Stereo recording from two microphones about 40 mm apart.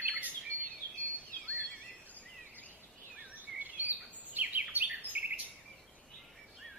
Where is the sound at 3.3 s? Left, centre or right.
Right.